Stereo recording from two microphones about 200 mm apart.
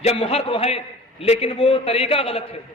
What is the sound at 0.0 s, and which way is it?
A man's voice, 30° left (ahead or behind).